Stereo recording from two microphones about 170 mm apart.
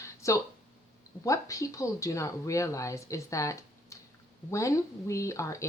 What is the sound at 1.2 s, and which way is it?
A woman's voice, 20° left (ahead or behind).